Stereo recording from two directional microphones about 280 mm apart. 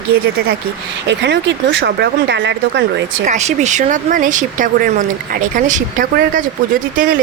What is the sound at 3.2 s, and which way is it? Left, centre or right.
Speech, right.